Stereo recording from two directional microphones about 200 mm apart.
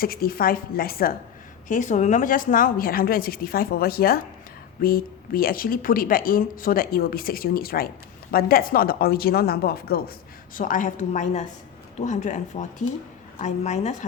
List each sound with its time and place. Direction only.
0.0 s a woman's voice: 50° left (ahead or behind)